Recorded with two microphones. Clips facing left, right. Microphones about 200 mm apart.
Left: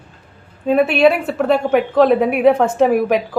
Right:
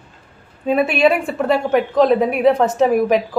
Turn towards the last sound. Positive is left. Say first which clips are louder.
# even
turn(degrees=0)  # may be behind; listen again after turning